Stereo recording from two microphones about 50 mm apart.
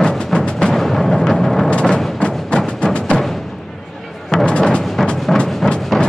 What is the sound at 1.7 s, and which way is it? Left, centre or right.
Music, left.